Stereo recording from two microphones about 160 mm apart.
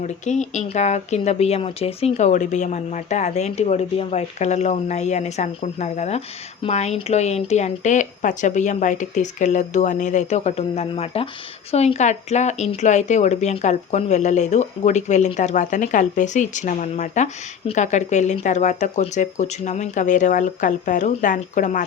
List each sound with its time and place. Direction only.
0.0 s speech: 45° left (ahead or behind)